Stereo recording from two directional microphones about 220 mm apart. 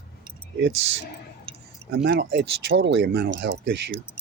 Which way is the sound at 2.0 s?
50° right (ahead or behind).